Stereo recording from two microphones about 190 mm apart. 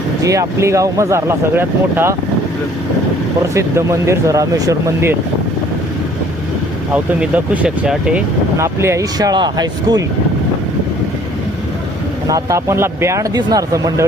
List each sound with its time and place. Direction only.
0.2 s speech: 15° right (ahead or behind)
3.5 s speech: 15° right (ahead or behind)
6.9 s speech: 10° right (ahead or behind)
12.3 s speech: 15° right (ahead or behind)